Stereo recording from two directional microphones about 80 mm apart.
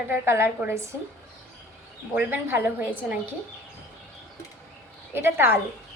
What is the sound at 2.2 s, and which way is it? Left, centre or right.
A woman's voice, right.